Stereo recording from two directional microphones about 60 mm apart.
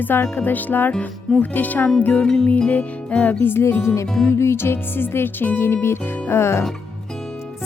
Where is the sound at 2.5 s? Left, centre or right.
Left.